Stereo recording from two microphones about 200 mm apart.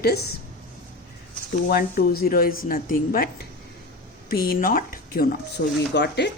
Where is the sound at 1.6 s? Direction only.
50° left (ahead or behind).